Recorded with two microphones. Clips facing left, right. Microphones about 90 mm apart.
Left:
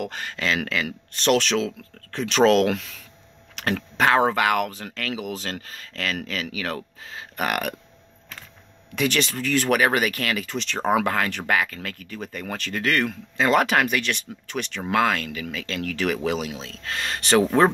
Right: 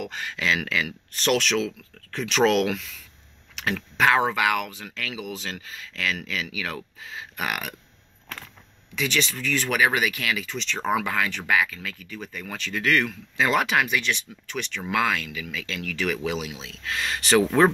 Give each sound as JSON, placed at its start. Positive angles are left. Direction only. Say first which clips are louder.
{"t": 0.0, "sound": "speech", "louder": "left 1 dB", "side_deg": 45}
{"t": 2.7, "sound": "speech", "louder": "left 3 dB", "side_deg": 55}
{"t": 3.5, "sound": "speech", "louder": "left 2 dB", "side_deg": 45}
{"t": 8.9, "sound": "speech", "louder": "left 3 dB", "side_deg": 50}